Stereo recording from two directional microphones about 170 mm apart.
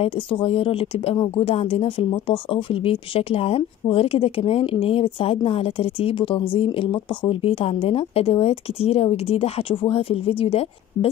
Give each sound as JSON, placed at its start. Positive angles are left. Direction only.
{"t": 0.0, "sound": "speech", "side_deg": 35}